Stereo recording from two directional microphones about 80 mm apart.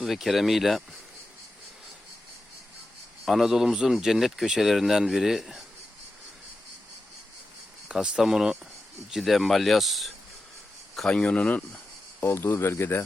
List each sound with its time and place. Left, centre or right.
0.0 s speech: centre
3.2 s speech: centre
7.9 s speech: centre
11.1 s speech: centre
12.2 s speech: left